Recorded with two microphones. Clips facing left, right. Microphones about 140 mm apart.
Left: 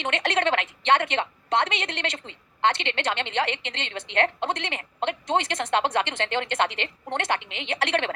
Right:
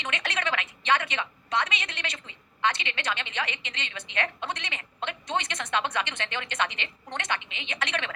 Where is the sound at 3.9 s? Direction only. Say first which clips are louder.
Left 8 dB; 55° left (ahead or behind).